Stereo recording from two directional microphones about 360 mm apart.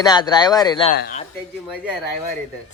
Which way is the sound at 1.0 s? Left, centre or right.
Left.